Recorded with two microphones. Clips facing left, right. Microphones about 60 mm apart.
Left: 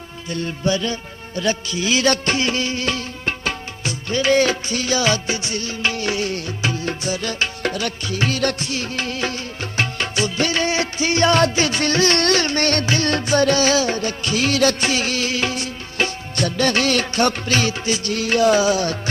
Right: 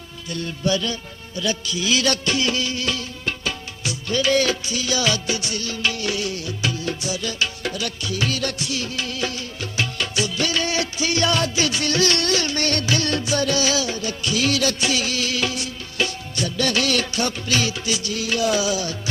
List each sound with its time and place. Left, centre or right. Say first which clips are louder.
0.3 s music of bollywood: left 2 dB; left
1.4 s music: left 3 dB; left
7.6 s music of bollywood: left 4 dB; left
8.4 s music: left 4 dB; left
11.3 s music of bollywood: left 5 dB; left
12.2 s music of bollywood: left 4 dB; left
17.5 s music: left 3 dB; left